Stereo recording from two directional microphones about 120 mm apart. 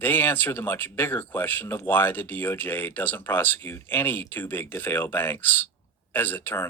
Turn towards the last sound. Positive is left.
turn(degrees=20)  # may be behind; listen again after turning